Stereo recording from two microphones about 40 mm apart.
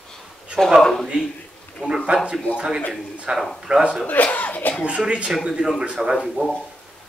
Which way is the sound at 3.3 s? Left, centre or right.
Right.